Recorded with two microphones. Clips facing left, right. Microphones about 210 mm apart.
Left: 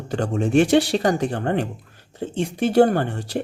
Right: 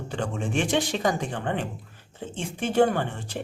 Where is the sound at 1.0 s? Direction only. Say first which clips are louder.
Left 5 dB; 70° left (ahead or behind).